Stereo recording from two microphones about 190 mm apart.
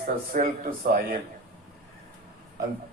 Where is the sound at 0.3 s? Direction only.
40° right (ahead or behind).